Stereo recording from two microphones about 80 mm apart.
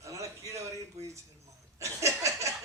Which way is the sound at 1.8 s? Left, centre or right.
Right.